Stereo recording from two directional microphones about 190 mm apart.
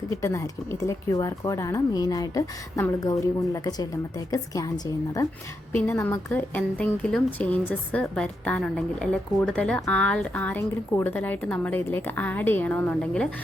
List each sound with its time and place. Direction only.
0.1 s speech: 15° left (ahead or behind)
5.7 s speech: 10° left (ahead or behind)